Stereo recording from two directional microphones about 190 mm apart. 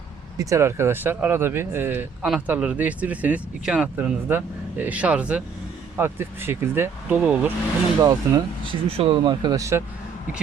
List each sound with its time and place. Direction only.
0.3 s speech: 15° right (ahead or behind)
8.0 s speech: 25° right (ahead or behind)